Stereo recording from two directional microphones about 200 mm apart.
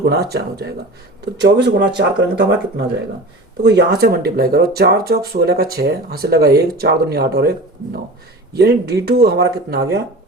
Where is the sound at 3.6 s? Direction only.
55° right (ahead or behind).